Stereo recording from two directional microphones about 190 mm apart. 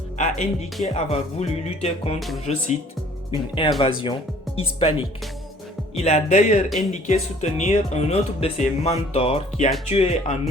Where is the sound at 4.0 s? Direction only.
25° left (ahead or behind).